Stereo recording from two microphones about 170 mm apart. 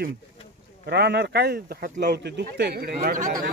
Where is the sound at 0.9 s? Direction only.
75° right (ahead or behind).